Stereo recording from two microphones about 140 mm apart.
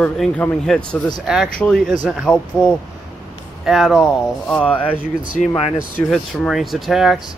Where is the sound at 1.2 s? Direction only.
5° right (ahead or behind).